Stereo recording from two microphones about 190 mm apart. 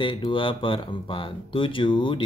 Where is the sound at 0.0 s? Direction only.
25° left (ahead or behind).